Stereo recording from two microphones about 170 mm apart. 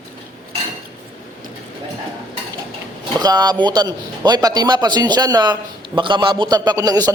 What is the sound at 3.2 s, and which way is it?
A man's voice, 25° right (ahead or behind).